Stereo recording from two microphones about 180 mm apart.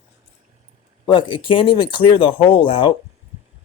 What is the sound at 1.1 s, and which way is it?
Speech, 25° left (ahead or behind).